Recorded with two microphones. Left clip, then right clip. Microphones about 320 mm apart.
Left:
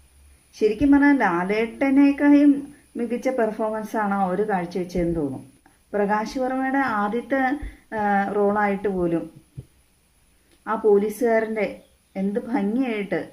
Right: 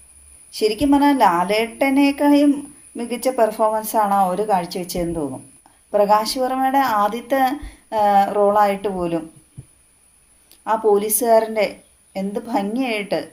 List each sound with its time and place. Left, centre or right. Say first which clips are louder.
0.5 s a woman's voice: right 2 dB; right
10.6 s a woman's voice: right 2 dB; right